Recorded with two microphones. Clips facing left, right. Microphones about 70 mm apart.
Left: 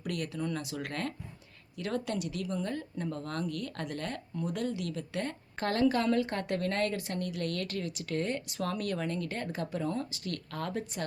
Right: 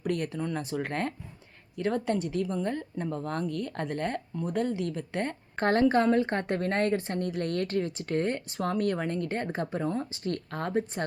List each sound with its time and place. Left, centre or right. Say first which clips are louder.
0.0 s a woman's voice: right 4 dB; right